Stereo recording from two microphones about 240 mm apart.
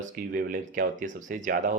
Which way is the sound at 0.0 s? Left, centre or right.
Right.